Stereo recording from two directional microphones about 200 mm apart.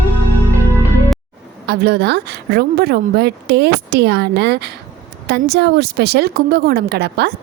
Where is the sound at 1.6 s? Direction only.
55° right (ahead or behind).